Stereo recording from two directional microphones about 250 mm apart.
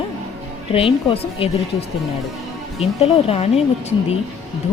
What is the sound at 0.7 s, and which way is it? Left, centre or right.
Speech, left.